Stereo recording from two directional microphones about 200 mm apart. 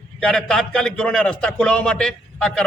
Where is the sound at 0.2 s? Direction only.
5° left (ahead or behind).